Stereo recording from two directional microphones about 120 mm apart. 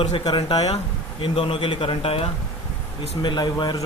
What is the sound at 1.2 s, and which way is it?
Speech, 50° left (ahead or behind).